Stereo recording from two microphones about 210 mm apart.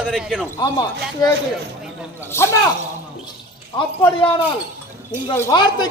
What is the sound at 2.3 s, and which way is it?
Speech, 10° left (ahead or behind).